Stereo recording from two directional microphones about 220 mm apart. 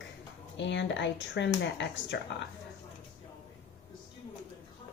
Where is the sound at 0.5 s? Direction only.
55° left (ahead or behind).